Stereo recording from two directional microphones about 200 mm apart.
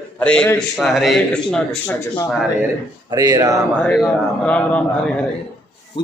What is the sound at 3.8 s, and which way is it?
Speech, 5° left (ahead or behind).